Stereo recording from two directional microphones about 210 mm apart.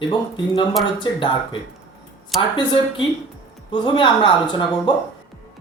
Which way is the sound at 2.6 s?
20° left (ahead or behind).